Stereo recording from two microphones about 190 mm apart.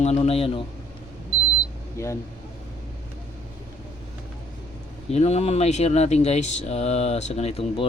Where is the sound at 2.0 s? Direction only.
15° left (ahead or behind).